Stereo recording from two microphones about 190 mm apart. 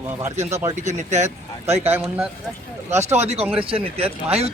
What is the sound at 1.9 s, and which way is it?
Speech, 10° right (ahead or behind).